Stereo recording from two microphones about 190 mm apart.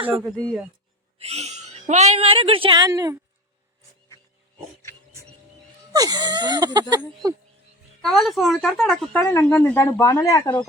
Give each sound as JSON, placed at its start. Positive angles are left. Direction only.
{"t": 0.3, "sound": "speech", "side_deg": 0}
{"t": 1.2, "sound": "speech", "side_deg": -35}
{"t": 5.9, "sound": "speech", "side_deg": -20}
{"t": 8.0, "sound": "speech", "side_deg": 0}